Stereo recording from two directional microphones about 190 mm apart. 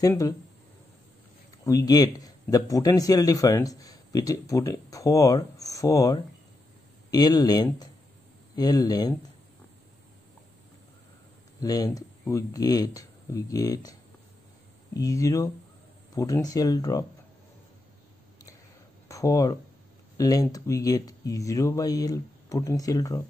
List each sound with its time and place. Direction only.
0.0 s a man's voice: 15° left (ahead or behind)
1.7 s a man's voice: 20° left (ahead or behind)
11.6 s speech: 20° left (ahead or behind)
15.0 s a man's voice: 15° left (ahead or behind)
19.0 s a man's voice: 15° left (ahead or behind)